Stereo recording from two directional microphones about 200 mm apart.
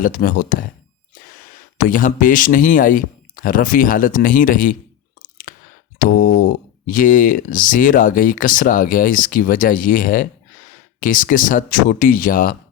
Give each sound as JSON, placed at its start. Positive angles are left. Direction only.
{"t": 0.0, "sound": "speech", "side_deg": 45}
{"t": 1.8, "sound": "speech", "side_deg": 40}
{"t": 5.2, "sound": "a sound", "side_deg": 45}
{"t": 6.1, "sound": "speech", "side_deg": 50}